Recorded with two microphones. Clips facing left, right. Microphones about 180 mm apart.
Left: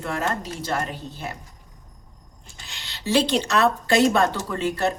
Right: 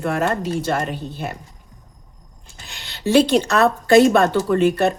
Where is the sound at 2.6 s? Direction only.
55° right (ahead or behind).